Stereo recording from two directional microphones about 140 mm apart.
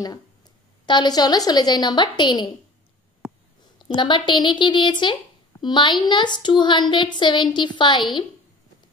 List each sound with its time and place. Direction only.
0.8 s a woman's voice: 30° left (ahead or behind)
3.7 s a woman's voice: 35° left (ahead or behind)